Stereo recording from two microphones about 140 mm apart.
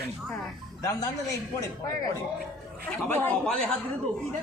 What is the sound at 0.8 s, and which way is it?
Speech, 25° left (ahead or behind).